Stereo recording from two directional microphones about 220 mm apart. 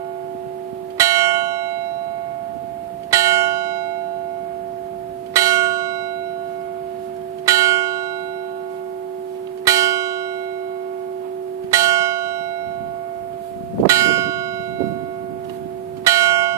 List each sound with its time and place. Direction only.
0.9 s church bell: 15° right (ahead or behind)
3.1 s church bell: 15° right (ahead or behind)
5.3 s church bell: 15° right (ahead or behind)
7.4 s church bell: 15° right (ahead or behind)
9.7 s church bell: 15° right (ahead or behind)
11.7 s church bell: 15° right (ahead or behind)
13.8 s church bell: 15° right (ahead or behind)
16.0 s church bell: 15° right (ahead or behind)